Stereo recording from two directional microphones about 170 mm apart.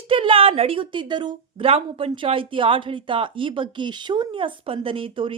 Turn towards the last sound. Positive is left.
turn(degrees=-30)  # may be behind; listen again after turning